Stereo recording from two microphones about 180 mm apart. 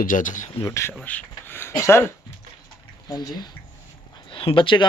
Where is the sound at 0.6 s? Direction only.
15° left (ahead or behind).